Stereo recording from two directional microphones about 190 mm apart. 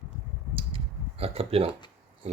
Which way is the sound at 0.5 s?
30° right (ahead or behind).